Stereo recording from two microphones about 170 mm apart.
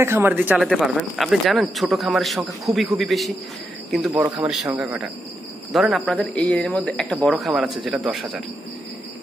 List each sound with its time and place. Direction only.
0.0 s a man's voice: 15° right (ahead or behind)
4.1 s a man's voice: 20° right (ahead or behind)
4.7 s a man's voice: 5° right (ahead or behind)